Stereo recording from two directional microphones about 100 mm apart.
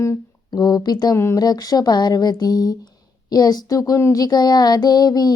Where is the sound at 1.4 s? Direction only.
40° left (ahead or behind).